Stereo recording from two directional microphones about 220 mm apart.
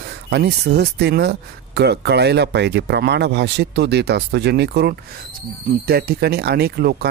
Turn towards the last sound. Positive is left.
turn(degrees=-45)  # may be behind; listen again after turning